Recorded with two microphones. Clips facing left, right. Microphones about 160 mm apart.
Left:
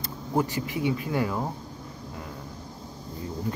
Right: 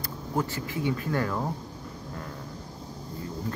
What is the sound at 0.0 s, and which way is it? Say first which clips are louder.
Speech: left 3 dB; 20° left (ahead or behind).